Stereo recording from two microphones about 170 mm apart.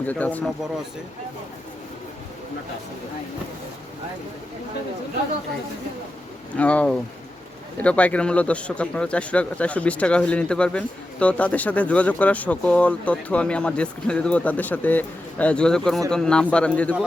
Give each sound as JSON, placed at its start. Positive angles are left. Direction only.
{"t": 0.1, "sound": "speech", "side_deg": 10}
{"t": 6.6, "sound": "a man's voice", "side_deg": 5}